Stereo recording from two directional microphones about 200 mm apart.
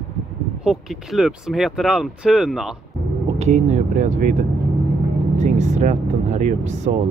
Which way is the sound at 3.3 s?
35° right (ahead or behind).